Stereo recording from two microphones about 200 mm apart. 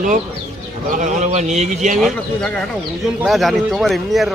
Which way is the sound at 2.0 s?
Centre (ahead or behind).